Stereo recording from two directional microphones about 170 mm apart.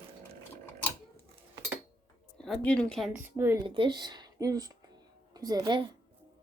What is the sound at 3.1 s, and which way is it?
Speech, 10° right (ahead or behind).